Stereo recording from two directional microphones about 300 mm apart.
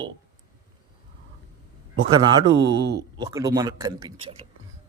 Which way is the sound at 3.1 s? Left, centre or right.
Centre.